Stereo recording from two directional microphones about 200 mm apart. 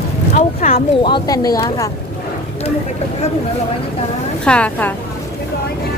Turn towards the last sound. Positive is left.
turn(degrees=10)  # may be behind; listen again after turning